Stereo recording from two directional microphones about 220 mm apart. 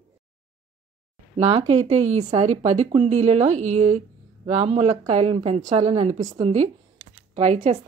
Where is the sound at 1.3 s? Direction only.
30° right (ahead or behind).